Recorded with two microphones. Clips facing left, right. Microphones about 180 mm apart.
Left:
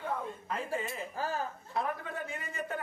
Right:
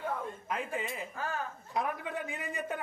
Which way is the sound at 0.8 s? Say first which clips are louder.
Left 1 dB; 15° right (ahead or behind).